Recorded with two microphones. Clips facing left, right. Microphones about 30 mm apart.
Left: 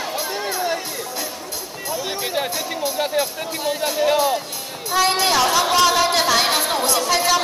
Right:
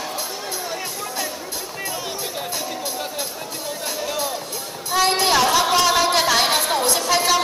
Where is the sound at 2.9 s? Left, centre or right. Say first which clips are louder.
Left 7 dB; left.